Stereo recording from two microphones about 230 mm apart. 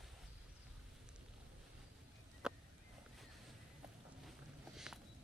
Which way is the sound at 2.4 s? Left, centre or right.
Centre.